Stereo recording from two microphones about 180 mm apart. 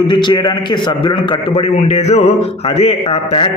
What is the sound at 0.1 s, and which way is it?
A man's voice, 25° left (ahead or behind).